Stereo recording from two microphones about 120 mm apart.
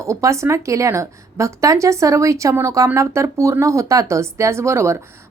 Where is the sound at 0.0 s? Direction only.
25° right (ahead or behind).